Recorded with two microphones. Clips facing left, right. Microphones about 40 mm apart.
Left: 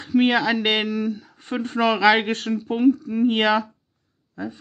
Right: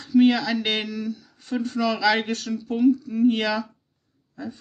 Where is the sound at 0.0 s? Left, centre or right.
Left.